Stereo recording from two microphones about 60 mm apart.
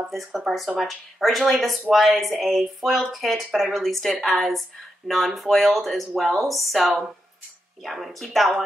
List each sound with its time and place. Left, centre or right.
0.1 s speech: centre